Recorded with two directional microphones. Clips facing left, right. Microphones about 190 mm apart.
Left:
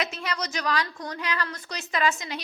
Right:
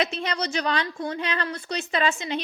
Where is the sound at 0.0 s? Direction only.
30° right (ahead or behind).